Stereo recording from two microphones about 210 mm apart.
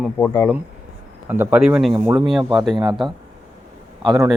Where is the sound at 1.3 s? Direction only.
10° right (ahead or behind).